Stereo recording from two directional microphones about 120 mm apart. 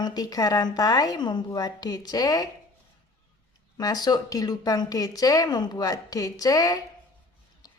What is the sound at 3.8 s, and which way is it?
A woman's voice, 35° left (ahead or behind).